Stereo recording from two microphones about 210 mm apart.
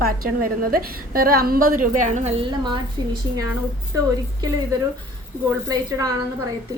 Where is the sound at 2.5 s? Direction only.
20° right (ahead or behind).